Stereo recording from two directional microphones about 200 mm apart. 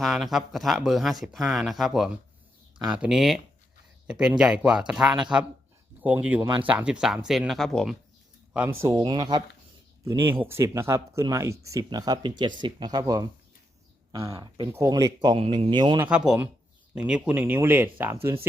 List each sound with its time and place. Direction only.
0.0 s speech: centre (ahead or behind)
6.4 s speech: 20° right (ahead or behind)
6.7 s speech: 5° right (ahead or behind)
8.8 s speech: 15° right (ahead or behind)
16.0 s speech: 5° right (ahead or behind)